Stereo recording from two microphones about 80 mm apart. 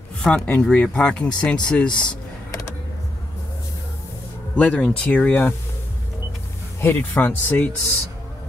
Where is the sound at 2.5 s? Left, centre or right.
Left.